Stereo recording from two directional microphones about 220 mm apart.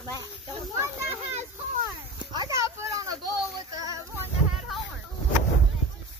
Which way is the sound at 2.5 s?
15° right (ahead or behind).